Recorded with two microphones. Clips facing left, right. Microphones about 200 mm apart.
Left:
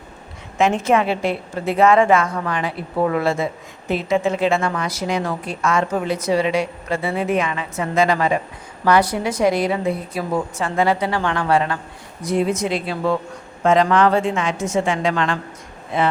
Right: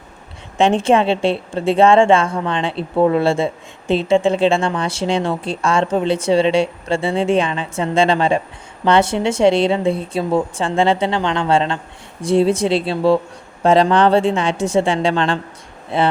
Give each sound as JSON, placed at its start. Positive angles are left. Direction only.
{"t": 0.6, "sound": "a woman's voice", "side_deg": -30}